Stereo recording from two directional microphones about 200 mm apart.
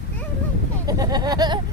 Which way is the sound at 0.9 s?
20° right (ahead or behind).